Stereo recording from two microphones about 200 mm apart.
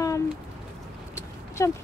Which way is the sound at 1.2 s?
15° left (ahead or behind).